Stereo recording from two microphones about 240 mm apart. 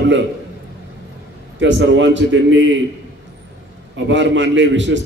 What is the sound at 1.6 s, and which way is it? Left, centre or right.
A man's voice, right.